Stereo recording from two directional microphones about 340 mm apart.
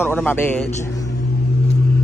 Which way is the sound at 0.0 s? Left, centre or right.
Centre.